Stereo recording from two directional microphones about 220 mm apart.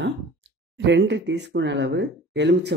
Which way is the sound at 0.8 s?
55° right (ahead or behind).